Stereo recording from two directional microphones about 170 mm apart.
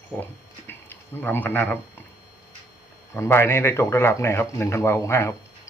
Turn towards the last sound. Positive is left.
turn(degrees=15)  # may be behind; listen again after turning